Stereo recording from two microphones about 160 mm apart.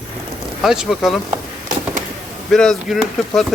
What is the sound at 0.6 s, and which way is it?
Speech, 5° right (ahead or behind).